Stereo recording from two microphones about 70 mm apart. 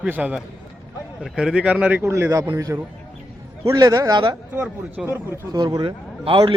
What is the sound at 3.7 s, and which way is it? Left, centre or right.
Speech, right.